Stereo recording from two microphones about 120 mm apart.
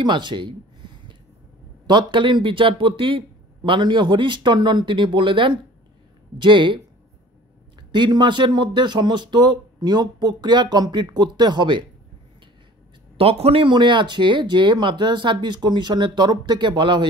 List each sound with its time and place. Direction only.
0.0 s a sound: 40° right (ahead or behind)
1.9 s speech: 40° right (ahead or behind)
7.9 s speech: 40° right (ahead or behind)
13.2 s speech: 55° right (ahead or behind)